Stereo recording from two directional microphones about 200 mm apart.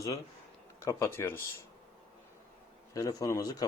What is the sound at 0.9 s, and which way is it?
Speech, 15° left (ahead or behind).